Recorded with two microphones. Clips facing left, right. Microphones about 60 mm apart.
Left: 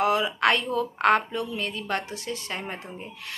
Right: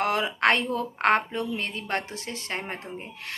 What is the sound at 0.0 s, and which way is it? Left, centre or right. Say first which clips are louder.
A woman's voice: left 1 dB; right.